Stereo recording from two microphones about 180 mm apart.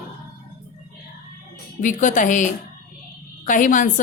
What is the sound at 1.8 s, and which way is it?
A woman's voice, 45° left (ahead or behind).